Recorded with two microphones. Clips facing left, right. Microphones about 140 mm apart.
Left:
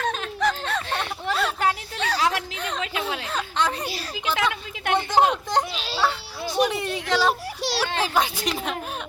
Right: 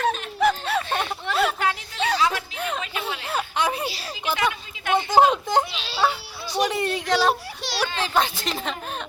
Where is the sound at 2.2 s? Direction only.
70° left (ahead or behind).